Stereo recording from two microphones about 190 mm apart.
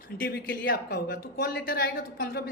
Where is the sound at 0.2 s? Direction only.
55° left (ahead or behind).